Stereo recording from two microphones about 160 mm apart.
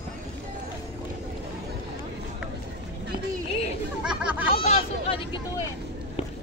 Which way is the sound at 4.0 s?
5° right (ahead or behind).